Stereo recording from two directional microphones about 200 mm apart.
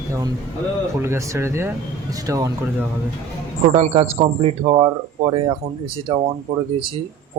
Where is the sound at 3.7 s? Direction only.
35° right (ahead or behind).